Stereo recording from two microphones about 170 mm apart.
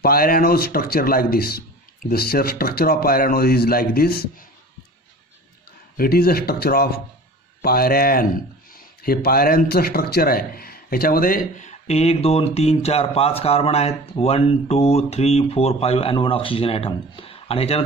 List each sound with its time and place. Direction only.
0.0 s a man's voice: 60° left (ahead or behind)
5.9 s a man's voice: 65° left (ahead or behind); by 17.8 s 35° left (ahead or behind)